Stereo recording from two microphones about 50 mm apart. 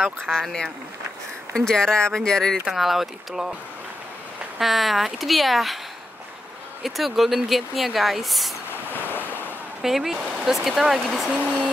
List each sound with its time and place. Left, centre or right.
0.0 s speech: centre
2.7 s speech: centre
4.6 s speech: centre
6.8 s speech: centre
8.9 s waves: left
9.8 s speech: centre
11.2 s speech: right